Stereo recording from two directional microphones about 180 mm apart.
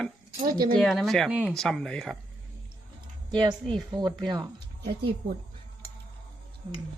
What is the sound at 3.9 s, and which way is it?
Speech, 25° right (ahead or behind).